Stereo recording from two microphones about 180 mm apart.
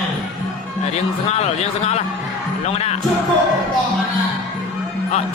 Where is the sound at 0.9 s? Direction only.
35° left (ahead or behind).